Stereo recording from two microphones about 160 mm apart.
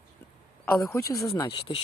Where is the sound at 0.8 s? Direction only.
20° left (ahead or behind).